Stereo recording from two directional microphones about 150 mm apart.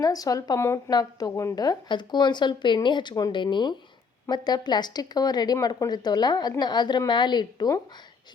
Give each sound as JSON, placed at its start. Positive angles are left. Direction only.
{"t": 0.0, "sound": "a woman's voice", "side_deg": 25}